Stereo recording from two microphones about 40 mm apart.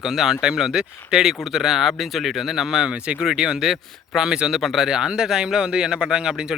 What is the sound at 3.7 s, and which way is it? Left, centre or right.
Speech, centre.